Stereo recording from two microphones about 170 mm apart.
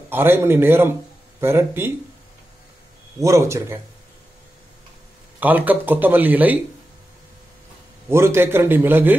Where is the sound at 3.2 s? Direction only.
15° right (ahead or behind).